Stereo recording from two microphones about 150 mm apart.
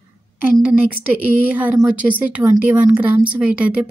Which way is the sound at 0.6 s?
10° right (ahead or behind).